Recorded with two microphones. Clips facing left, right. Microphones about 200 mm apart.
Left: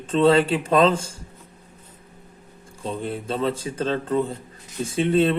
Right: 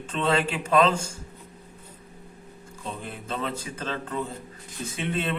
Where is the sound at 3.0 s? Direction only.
30° left (ahead or behind).